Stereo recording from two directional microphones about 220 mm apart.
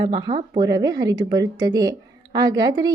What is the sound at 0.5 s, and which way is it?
A woman's voice, 20° right (ahead or behind).